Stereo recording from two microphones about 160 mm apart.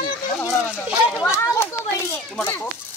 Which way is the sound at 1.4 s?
15° left (ahead or behind).